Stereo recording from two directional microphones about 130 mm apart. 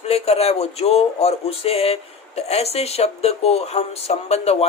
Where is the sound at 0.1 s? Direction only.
50° left (ahead or behind).